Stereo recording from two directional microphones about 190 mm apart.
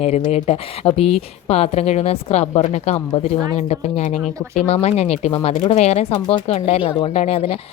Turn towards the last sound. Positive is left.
turn(degrees=30)  # may be behind; listen again after turning